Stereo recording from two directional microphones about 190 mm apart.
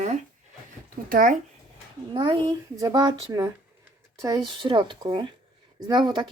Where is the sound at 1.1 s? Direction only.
45° right (ahead or behind).